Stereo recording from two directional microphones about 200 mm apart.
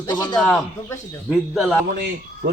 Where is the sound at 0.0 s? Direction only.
20° left (ahead or behind).